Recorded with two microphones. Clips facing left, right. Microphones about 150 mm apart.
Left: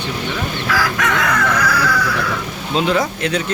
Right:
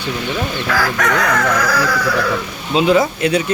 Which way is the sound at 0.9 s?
40° right (ahead or behind).